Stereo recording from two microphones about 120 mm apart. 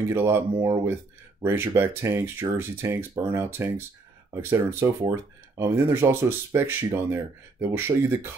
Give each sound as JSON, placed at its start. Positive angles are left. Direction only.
{"t": 0.1, "sound": "speech", "side_deg": -20}